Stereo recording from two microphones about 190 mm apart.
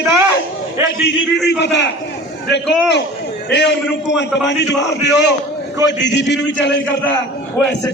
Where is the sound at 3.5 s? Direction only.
65° left (ahead or behind).